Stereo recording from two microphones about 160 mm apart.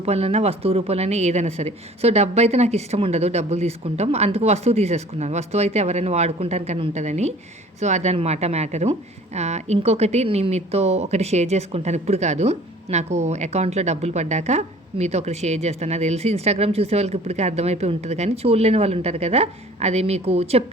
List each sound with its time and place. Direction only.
0.0 s a woman's voice: 40° right (ahead or behind)